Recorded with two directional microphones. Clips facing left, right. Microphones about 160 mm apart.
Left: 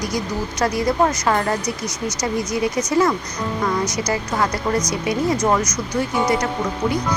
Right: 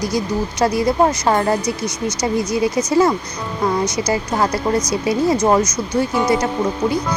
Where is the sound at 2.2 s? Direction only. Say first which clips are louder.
Right 3 dB; 25° right (ahead or behind).